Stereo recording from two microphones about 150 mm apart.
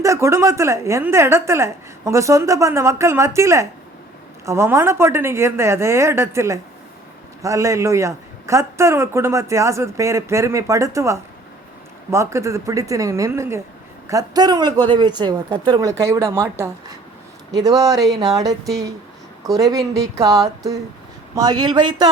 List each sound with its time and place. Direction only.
0.0 s a man's voice: 20° right (ahead or behind)
21.3 s a man's voice: 25° right (ahead or behind)